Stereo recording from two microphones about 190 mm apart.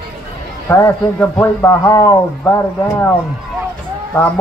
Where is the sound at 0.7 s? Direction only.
10° left (ahead or behind).